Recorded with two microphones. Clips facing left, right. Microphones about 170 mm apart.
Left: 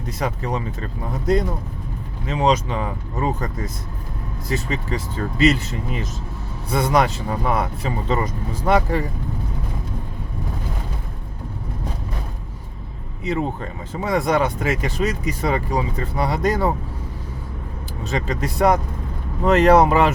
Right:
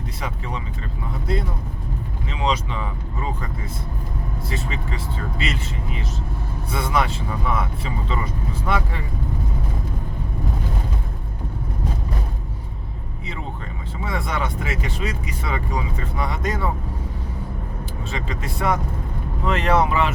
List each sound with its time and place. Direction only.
0.2 s speech: 45° left (ahead or behind)
13.9 s speech: 40° left (ahead or behind)
18.1 s speech: 40° left (ahead or behind)